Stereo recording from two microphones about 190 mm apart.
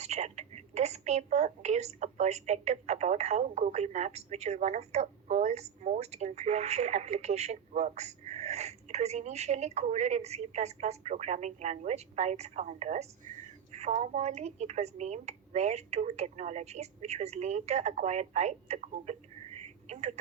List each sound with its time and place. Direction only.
0.0 s a woman's voice: 35° right (ahead or behind)